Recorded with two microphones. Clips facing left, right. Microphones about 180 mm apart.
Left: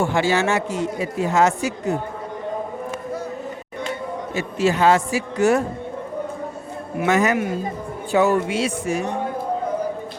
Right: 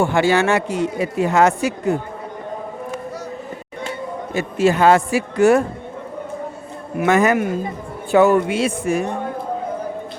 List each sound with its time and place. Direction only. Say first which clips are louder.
0.0 s a woman's voice: right 3 dB; 55° right (ahead or behind)
4.4 s speech: right 3 dB; 50° right (ahead or behind)
7.0 s a woman's voice: right 3 dB; 55° right (ahead or behind)